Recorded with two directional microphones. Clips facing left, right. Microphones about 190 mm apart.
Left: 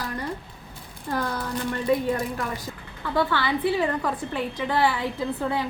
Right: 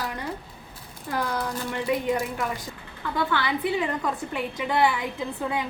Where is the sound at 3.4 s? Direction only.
20° right (ahead or behind).